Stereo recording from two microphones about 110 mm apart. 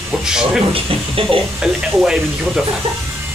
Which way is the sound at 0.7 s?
55° right (ahead or behind).